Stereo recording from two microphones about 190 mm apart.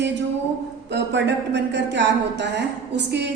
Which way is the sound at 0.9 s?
65° right (ahead or behind).